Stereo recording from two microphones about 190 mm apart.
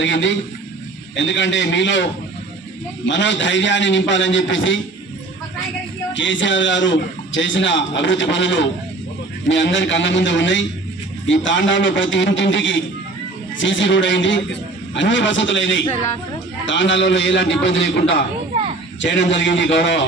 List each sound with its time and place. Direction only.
0.0 s a man's voice: 75° left (ahead or behind)
3.1 s a man's voice: 75° left (ahead or behind)
6.1 s a man's voice: 75° left (ahead or behind)